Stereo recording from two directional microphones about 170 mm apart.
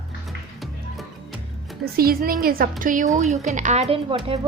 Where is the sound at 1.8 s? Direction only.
60° right (ahead or behind).